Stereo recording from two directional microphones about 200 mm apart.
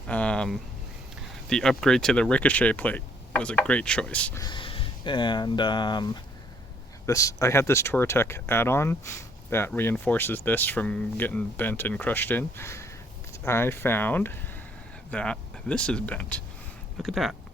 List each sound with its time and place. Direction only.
0.1 s a sound: 5° left (ahead or behind)
1.5 s speech: 5° left (ahead or behind)
4.4 s speech: 25° left (ahead or behind); by 17.3 s centre (ahead or behind)